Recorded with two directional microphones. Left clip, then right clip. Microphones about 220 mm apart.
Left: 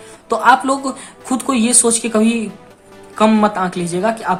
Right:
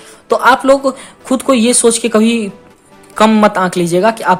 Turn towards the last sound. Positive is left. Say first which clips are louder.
# right 7 dB
turn(degrees=-30)  # may be behind; listen again after turning